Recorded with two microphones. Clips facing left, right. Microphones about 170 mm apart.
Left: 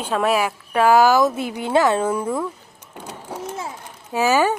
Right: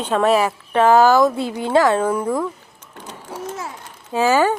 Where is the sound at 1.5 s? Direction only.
15° left (ahead or behind).